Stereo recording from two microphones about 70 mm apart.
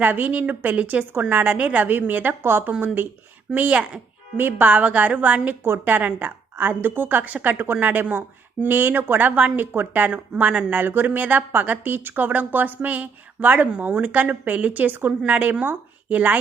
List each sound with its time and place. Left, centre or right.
0.0 s speech: right
4.4 s speech: right